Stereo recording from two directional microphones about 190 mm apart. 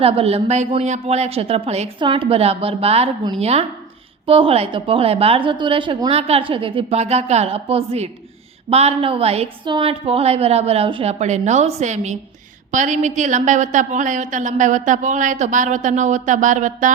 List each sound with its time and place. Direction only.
0.0 s a woman's voice: 30° right (ahead or behind)